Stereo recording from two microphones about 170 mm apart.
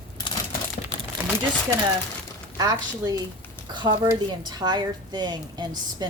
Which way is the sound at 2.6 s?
20° right (ahead or behind).